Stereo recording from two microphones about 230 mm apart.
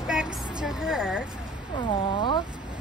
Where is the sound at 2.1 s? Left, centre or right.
Centre.